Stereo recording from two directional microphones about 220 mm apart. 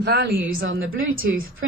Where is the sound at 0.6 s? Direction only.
60° right (ahead or behind).